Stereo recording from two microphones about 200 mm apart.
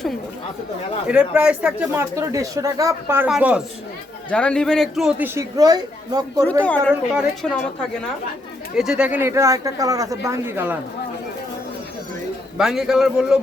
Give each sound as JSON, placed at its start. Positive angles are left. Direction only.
{"t": 1.0, "sound": "speech", "side_deg": -5}
{"t": 4.3, "sound": "speech", "side_deg": 5}
{"t": 6.6, "sound": "a woman's voice", "side_deg": 5}
{"t": 6.9, "sound": "a woman's voice", "side_deg": -5}
{"t": 12.5, "sound": "a woman's voice", "side_deg": 0}